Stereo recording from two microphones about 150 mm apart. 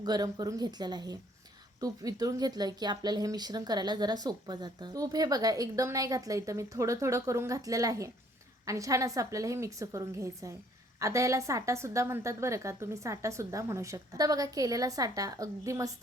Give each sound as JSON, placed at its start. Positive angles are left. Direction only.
{"t": 0.0, "sound": "speech", "side_deg": -25}